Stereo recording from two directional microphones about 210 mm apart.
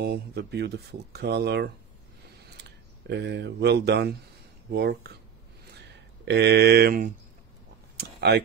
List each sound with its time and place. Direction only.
0.0 s speech: 50° right (ahead or behind)
3.1 s speech: 55° right (ahead or behind)
5.8 s a sound: 55° right (ahead or behind)
8.0 s speech: 50° right (ahead or behind)